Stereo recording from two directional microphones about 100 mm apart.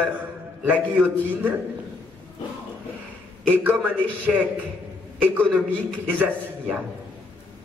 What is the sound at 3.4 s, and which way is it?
Speech, 15° right (ahead or behind).